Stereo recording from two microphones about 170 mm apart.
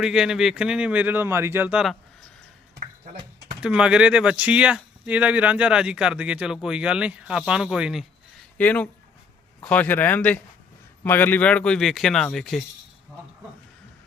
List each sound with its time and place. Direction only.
0.0 s speech: 5° right (ahead or behind)
2.8 s a sound: 45° right (ahead or behind)
3.6 s speech: 5° right (ahead or behind)
8.5 s speech: 10° left (ahead or behind)